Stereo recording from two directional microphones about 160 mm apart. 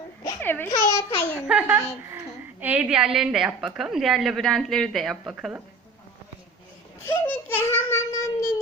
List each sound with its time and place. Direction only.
0.4 s a child's voice: 15° left (ahead or behind)
1.4 s a woman's voice: 10° right (ahead or behind)
7.0 s a sound: 15° left (ahead or behind)